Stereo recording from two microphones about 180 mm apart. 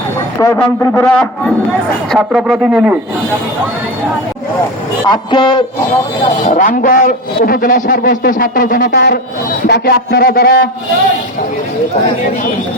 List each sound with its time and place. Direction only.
0.3 s a man's voice: 15° left (ahead or behind); by 3.0 s 10° right (ahead or behind)
5.0 s a man's voice: 25° left (ahead or behind)
6.4 s a man's voice: 45° left (ahead or behind)
8.9 s a man's voice: 65° left (ahead or behind)